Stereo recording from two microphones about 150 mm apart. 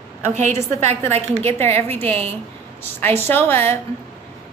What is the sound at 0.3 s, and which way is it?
Speech, 50° right (ahead or behind).